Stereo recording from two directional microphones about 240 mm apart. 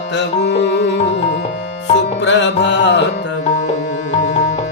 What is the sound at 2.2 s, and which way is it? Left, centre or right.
Music, left.